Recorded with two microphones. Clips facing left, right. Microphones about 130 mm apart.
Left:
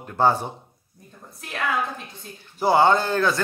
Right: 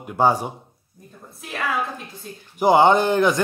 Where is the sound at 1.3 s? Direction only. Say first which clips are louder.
Right 1 dB; centre (ahead or behind).